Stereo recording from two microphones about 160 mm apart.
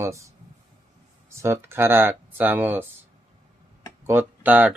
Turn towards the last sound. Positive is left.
turn(degrees=-10)  # may be behind; listen again after turning